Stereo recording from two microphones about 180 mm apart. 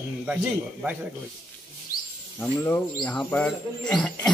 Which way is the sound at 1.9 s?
55° left (ahead or behind).